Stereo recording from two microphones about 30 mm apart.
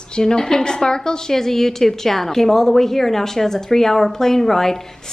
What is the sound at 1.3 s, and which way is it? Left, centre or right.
A woman's voice, centre.